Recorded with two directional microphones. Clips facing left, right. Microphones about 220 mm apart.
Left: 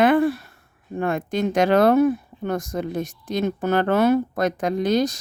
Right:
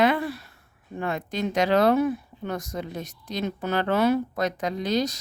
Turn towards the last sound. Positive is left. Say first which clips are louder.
# left 5 dB
turn(degrees=50)  # may be behind; listen again after turning